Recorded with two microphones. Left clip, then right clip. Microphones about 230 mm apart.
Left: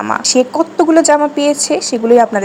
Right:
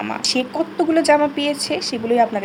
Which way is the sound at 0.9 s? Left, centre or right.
Centre.